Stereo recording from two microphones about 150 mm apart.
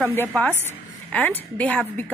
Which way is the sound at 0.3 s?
10° left (ahead or behind).